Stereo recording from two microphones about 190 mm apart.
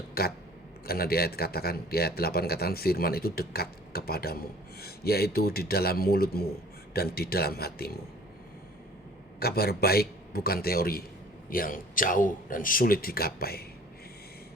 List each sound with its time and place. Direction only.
0.1 s speech: 55° left (ahead or behind)
9.4 s speech: 55° left (ahead or behind)